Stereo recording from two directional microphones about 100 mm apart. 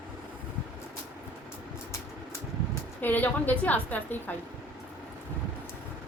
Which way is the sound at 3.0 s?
20° left (ahead or behind).